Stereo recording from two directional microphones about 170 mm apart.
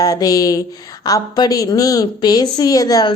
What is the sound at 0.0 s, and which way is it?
A woman's voice, 20° left (ahead or behind).